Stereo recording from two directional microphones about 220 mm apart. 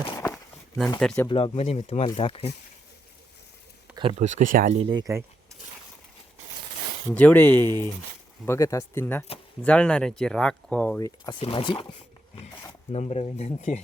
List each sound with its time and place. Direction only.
0.9 s speech: 5° left (ahead or behind)
1.3 s speech: 25° left (ahead or behind)
3.9 s speech: 25° right (ahead or behind)
7.1 s speech: 5° left (ahead or behind)
11.3 s speech: 25° left (ahead or behind)